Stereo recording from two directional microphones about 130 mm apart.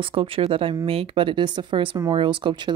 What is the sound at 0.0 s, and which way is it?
Speech, 45° right (ahead or behind).